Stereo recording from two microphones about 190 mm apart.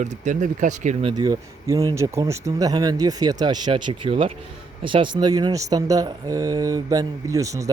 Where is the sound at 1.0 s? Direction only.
20° right (ahead or behind).